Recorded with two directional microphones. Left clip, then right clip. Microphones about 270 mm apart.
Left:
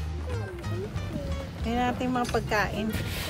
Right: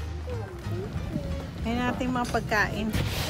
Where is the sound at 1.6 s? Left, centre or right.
Centre.